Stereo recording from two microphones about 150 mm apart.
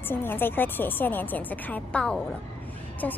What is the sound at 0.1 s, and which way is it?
A woman's voice, 15° left (ahead or behind).